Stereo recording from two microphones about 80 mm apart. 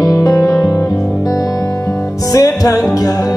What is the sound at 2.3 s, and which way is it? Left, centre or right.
Music, left.